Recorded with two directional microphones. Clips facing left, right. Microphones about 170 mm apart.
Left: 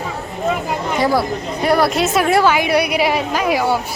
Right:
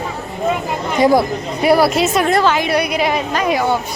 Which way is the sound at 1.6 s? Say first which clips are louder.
Right 3 dB; 5° right (ahead or behind).